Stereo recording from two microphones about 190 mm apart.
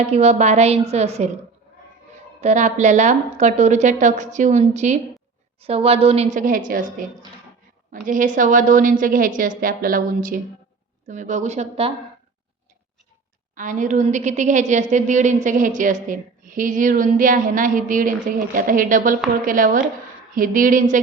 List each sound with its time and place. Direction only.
0.1 s a woman's voice: 35° right (ahead or behind)
2.4 s a woman's voice: 35° right (ahead or behind)
13.6 s a woman's voice: 40° right (ahead or behind)